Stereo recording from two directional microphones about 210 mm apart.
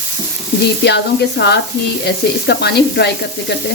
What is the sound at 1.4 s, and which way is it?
Speech, 50° left (ahead or behind).